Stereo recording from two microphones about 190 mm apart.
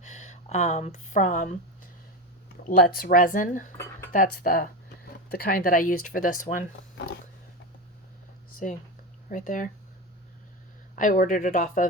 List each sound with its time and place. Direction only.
0.0 s a sound: 40° left (ahead or behind)
2.6 s speech: 55° left (ahead or behind)
9.3 s speech: 45° left (ahead or behind)
10.9 s speech: 45° left (ahead or behind)